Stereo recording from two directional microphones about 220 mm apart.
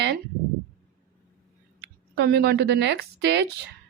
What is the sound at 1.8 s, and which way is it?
Speech, 50° right (ahead or behind).